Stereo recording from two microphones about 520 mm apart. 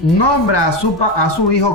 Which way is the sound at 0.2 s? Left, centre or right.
Left.